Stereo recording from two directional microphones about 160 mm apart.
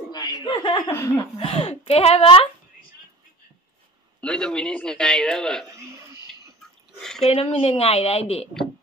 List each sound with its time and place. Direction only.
0.1 s speech: 25° left (ahead or behind)
1.4 s speech: 35° left (ahead or behind)
4.2 s a man's voice: 5° left (ahead or behind)
5.7 s speech: 20° right (ahead or behind)
7.0 s a sound: 5° left (ahead or behind)
7.4 s speech: 35° left (ahead or behind)